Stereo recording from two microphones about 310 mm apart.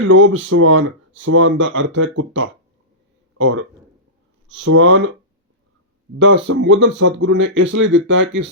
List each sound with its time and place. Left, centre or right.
0.0 s speech: right
1.1 s speech: right
3.3 s speech: right
6.1 s speech: right